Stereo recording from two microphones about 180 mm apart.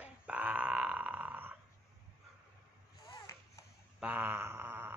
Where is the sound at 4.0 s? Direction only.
10° right (ahead or behind).